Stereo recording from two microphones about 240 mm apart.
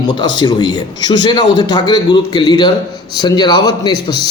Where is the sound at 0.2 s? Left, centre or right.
Centre.